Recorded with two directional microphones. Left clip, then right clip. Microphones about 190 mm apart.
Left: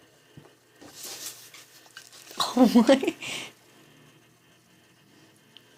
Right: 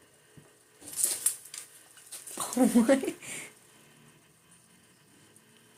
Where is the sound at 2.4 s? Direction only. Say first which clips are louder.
Left 6 dB; 25° left (ahead or behind).